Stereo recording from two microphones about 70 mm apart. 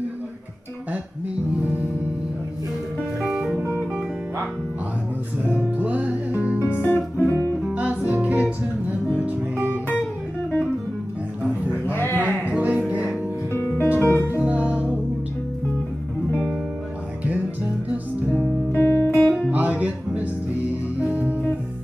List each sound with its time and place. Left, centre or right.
1.6 s music: right
5.5 s music: right
6.6 s music: left
7.7 s music: centre
11.9 s a sound: left
12.4 s music: centre
13.5 s music: left
14.4 s music: centre
18.3 s music: left
18.8 s music: left
19.5 s music: right
21.0 s music: centre